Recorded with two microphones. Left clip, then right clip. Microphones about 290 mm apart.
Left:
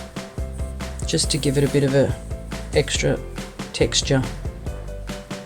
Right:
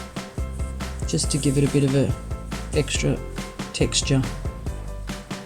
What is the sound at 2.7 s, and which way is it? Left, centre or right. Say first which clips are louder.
Speech: left 4 dB; left.